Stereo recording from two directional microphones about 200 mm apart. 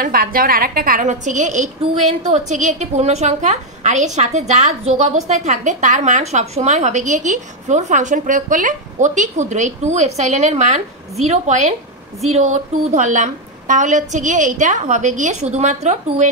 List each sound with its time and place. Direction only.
0.0 s a woman's voice: 45° right (ahead or behind)